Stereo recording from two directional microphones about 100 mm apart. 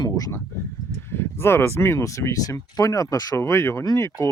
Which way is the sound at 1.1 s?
25° left (ahead or behind).